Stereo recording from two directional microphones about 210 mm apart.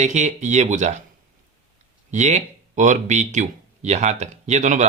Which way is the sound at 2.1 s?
35° right (ahead or behind).